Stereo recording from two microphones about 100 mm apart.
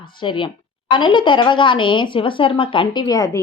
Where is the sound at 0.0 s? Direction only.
55° left (ahead or behind).